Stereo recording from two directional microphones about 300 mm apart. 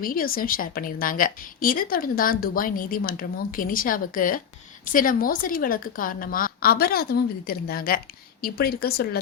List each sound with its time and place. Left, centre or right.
0.0 s a woman's voice: left